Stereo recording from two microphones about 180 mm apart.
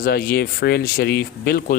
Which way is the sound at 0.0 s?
55° left (ahead or behind).